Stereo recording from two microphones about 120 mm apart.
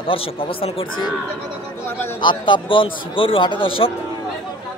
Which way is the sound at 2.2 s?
40° left (ahead or behind).